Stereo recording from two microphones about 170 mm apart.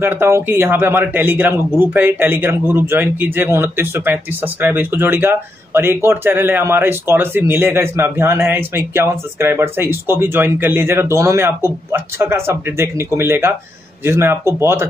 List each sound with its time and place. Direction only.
0.0 s speech: 15° right (ahead or behind)